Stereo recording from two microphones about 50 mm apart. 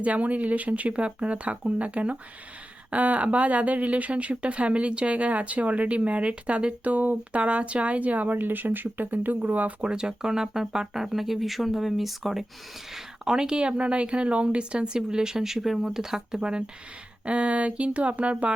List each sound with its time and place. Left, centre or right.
0.0 s speech: right
9.8 s speech: centre
12.9 s speech: centre